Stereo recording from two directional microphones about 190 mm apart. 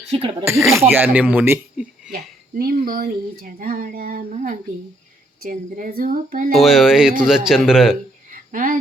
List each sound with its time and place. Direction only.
0.1 s speech: 30° right (ahead or behind)
0.7 s speech: 10° right (ahead or behind)
2.6 s speech: 50° right (ahead or behind)
4.3 s a woman's voice: 35° right (ahead or behind)
6.6 s speech: centre (ahead or behind)
8.3 s a sound: 45° right (ahead or behind)